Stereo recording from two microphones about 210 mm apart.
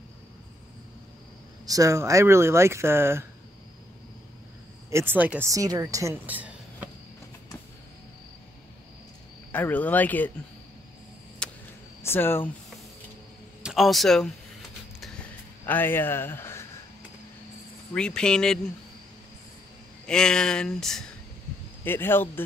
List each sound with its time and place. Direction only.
1.7 s speech: 15° right (ahead or behind)
4.9 s speech: 10° right (ahead or behind)
9.5 s speech: 10° left (ahead or behind)
11.4 s a sound: 5° left (ahead or behind)
12.0 s speech: 10° left (ahead or behind)
13.6 s speech: centre (ahead or behind)
15.6 s a man's voice: 10° left (ahead or behind)
17.9 s speech: 5° left (ahead or behind)
20.1 s speech: 5° left (ahead or behind)